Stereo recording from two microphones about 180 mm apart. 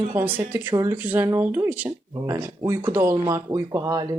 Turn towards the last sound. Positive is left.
turn(degrees=-20)  # may be behind; listen again after turning